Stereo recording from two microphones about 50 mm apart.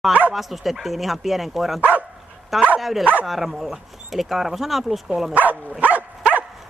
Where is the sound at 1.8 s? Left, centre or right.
Right.